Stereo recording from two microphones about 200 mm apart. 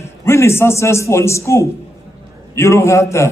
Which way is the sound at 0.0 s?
15° left (ahead or behind).